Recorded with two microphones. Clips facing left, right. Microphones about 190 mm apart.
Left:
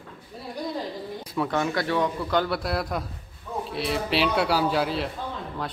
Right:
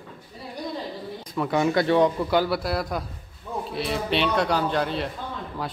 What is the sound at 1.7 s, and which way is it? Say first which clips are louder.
Speech: right 5 dB; 25° right (ahead or behind).